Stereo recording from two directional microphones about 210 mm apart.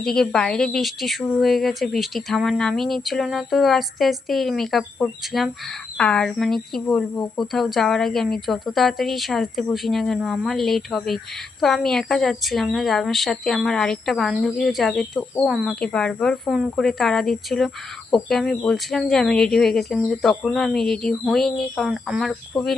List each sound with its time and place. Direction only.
0.0 s a woman's voice: centre (ahead or behind)